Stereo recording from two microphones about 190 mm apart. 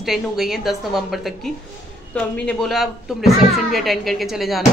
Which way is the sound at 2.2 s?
5° left (ahead or behind).